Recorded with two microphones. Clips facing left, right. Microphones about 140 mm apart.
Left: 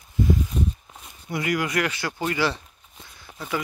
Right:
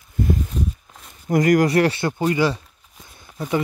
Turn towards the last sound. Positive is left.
turn(degrees=-25)  # may be behind; listen again after turning